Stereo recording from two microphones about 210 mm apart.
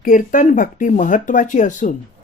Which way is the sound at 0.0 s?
40° left (ahead or behind).